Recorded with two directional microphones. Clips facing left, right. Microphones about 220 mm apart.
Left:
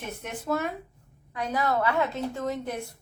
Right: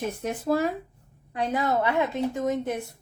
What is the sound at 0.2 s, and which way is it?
A woman's voice, 35° right (ahead or behind).